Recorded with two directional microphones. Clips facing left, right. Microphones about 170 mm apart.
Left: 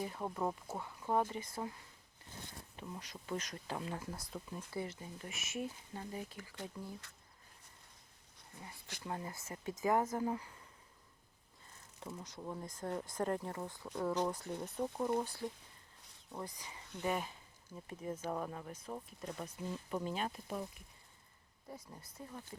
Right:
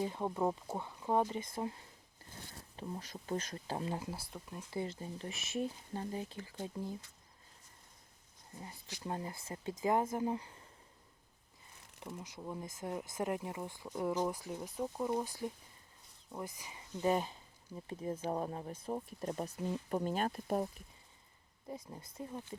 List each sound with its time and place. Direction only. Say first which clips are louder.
0.0 s speech: right 4 dB; 20° right (ahead or behind)
4.3 s speech: left 1 dB; centre (ahead or behind)
4.7 s speech: right 4 dB; 25° right (ahead or behind)
9.0 s speech: right 2 dB; 25° right (ahead or behind)
12.0 s speech: right 1 dB; 10° right (ahead or behind)
16.3 s speech: right 1 dB; 10° right (ahead or behind)
17.0 s speech: right 5 dB; 30° right (ahead or behind); by 20.7 s 45° right (ahead or behind)
21.7 s speech: right 5 dB; 20° right (ahead or behind)